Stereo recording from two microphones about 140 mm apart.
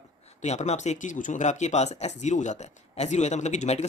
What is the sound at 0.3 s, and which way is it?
Speech, 50° left (ahead or behind).